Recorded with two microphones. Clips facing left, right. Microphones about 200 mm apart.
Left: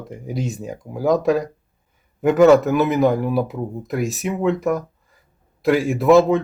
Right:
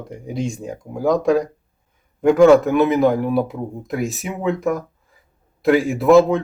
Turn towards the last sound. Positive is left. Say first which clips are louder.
# right 1 dB
turn(degrees=0)  # may be behind; listen again after turning